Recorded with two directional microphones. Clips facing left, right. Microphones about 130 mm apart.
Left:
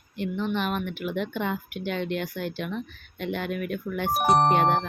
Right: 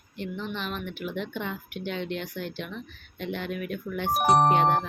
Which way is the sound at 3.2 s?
55° left (ahead or behind).